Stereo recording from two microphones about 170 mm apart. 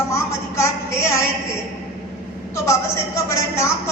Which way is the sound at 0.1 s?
15° left (ahead or behind).